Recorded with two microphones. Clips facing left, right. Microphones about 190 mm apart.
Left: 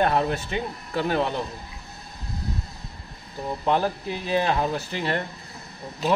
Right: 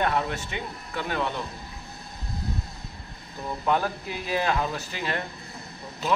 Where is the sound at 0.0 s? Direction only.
35° left (ahead or behind).